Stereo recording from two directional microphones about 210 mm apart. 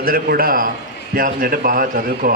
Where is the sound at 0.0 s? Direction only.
45° right (ahead or behind).